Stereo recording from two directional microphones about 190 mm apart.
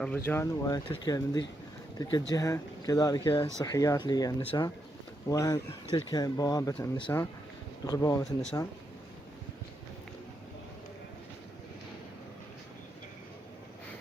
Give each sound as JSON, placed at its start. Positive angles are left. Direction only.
{"t": 0.3, "sound": "speech", "side_deg": 15}
{"t": 8.2, "sound": "speech", "side_deg": 5}